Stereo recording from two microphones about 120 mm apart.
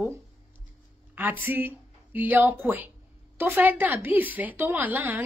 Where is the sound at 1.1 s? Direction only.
20° right (ahead or behind).